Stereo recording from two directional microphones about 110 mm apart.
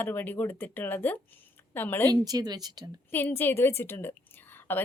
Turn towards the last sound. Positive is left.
turn(degrees=20)  # may be behind; listen again after turning